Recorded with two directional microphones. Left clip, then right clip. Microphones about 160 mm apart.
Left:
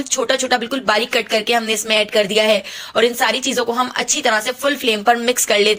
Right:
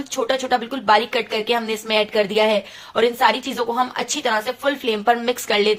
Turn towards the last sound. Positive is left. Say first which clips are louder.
# left 4 dB
turn(degrees=15)  # may be behind; listen again after turning